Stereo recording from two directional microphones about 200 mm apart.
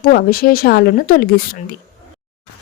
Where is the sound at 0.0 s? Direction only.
45° left (ahead or behind).